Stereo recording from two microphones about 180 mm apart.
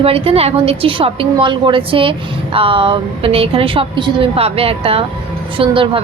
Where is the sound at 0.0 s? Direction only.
30° right (ahead or behind).